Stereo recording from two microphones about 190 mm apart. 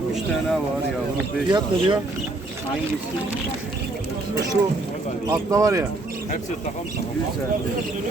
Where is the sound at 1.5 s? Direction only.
25° right (ahead or behind).